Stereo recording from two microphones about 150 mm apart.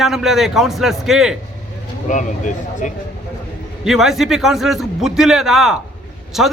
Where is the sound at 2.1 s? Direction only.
55° left (ahead or behind).